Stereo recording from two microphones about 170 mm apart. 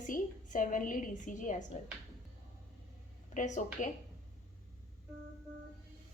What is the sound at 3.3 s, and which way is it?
Speech, 45° left (ahead or behind).